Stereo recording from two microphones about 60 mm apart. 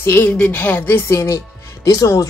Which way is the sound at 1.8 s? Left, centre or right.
Left.